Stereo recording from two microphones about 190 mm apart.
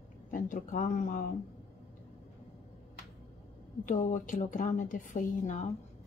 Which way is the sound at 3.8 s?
40° left (ahead or behind).